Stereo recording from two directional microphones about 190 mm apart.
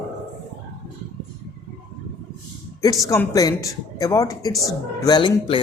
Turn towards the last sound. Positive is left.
turn(degrees=25)  # may be behind; listen again after turning